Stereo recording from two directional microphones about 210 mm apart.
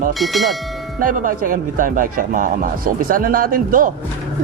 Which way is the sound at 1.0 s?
40° right (ahead or behind).